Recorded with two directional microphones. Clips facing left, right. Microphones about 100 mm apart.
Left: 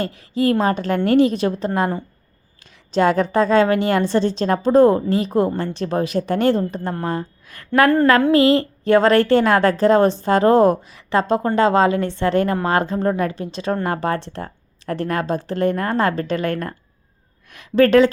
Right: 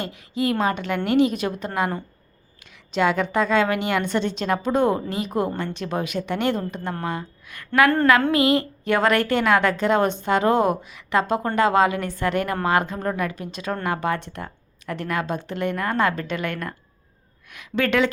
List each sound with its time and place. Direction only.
0.0 s a woman's voice: 35° left (ahead or behind)